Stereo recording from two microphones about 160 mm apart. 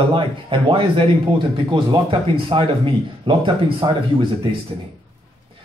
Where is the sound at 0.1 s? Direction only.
30° right (ahead or behind).